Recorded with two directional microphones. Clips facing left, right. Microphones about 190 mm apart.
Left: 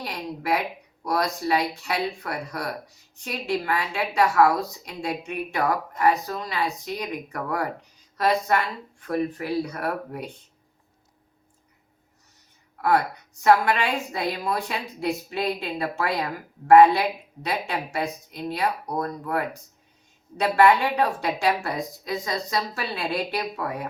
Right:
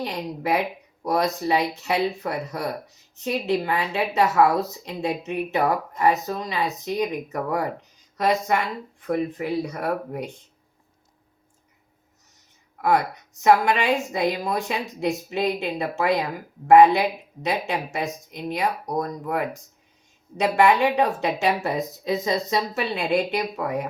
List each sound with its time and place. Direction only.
0.0 s a woman's voice: 20° right (ahead or behind)
13.4 s a woman's voice: 15° right (ahead or behind)